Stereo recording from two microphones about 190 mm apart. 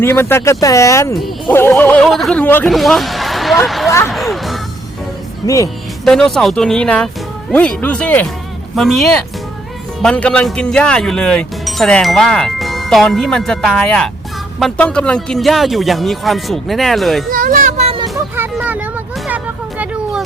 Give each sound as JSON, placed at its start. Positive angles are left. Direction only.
{"t": 0.0, "sound": "speech", "side_deg": 10}
{"t": 4.0, "sound": "music", "side_deg": 0}
{"t": 5.4, "sound": "speech", "side_deg": 20}
{"t": 6.1, "sound": "speech", "side_deg": 0}
{"t": 17.3, "sound": "children playing", "side_deg": -45}
{"t": 18.3, "sound": "vehicle", "side_deg": -10}
{"t": 19.8, "sound": "a sound", "side_deg": -5}